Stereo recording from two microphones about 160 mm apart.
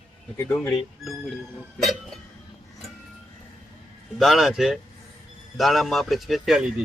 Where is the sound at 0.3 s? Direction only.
15° left (ahead or behind).